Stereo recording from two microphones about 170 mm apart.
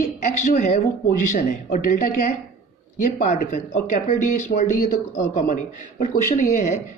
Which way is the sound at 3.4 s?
50° left (ahead or behind).